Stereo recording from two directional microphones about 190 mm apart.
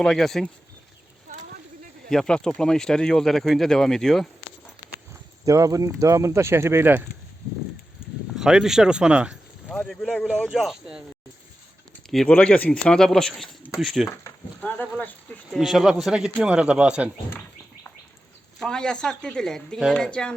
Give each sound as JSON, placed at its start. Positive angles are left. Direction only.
{"t": 0.0, "sound": "speech", "side_deg": 0}
{"t": 1.3, "sound": "a sound", "side_deg": -45}
{"t": 2.0, "sound": "speech", "side_deg": 5}
{"t": 5.5, "sound": "speech", "side_deg": -15}
{"t": 8.4, "sound": "speech", "side_deg": -5}
{"t": 12.1, "sound": "speech", "side_deg": 5}
{"t": 18.6, "sound": "speech", "side_deg": 5}